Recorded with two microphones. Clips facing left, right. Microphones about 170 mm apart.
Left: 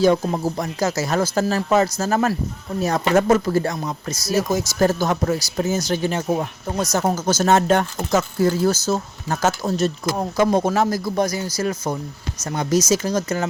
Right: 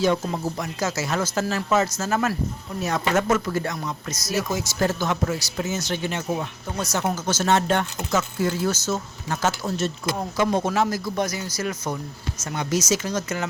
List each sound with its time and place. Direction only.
0.0 s speech: 35° left (ahead or behind)